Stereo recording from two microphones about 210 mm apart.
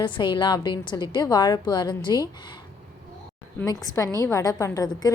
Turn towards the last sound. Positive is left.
turn(degrees=15)  # may be behind; listen again after turning